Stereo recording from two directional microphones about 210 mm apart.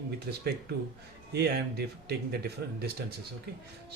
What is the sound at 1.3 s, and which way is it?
Speech, 50° right (ahead or behind).